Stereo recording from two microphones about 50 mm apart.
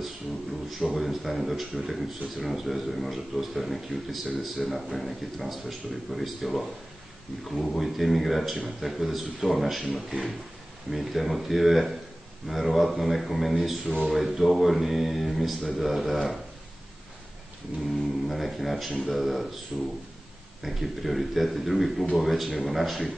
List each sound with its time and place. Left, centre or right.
0.7 s speech: centre
18.2 s speech: centre
19.7 s speech: right
20.6 s speech: centre